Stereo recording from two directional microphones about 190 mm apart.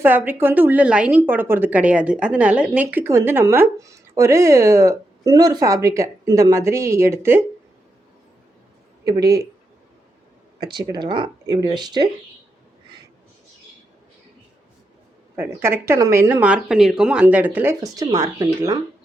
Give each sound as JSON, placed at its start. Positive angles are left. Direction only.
{"t": 0.0, "sound": "a woman's voice", "side_deg": -10}
{"t": 9.0, "sound": "speech", "side_deg": -20}
{"t": 10.6, "sound": "speech", "side_deg": -25}
{"t": 15.4, "sound": "a woman's voice", "side_deg": -10}